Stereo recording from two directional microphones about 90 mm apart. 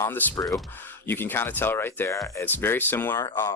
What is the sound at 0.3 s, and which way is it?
Speech, 40° left (ahead or behind).